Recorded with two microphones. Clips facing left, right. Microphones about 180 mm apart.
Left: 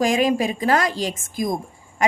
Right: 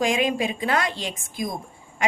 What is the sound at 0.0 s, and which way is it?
A woman's voice, 40° left (ahead or behind).